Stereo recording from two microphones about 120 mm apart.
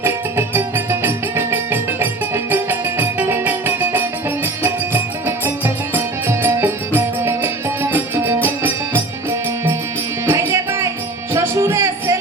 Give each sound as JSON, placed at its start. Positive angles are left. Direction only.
{"t": 0.0, "sound": "music", "side_deg": -20}
{"t": 5.2, "sound": "music", "side_deg": -20}
{"t": 10.2, "sound": "music", "side_deg": -20}